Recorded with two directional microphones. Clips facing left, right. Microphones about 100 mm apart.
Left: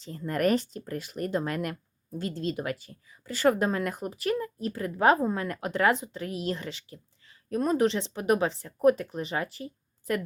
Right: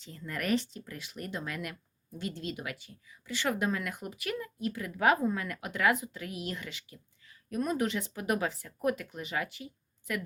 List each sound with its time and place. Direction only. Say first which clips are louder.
0.0 s speech: left 10 dB; 40° left (ahead or behind)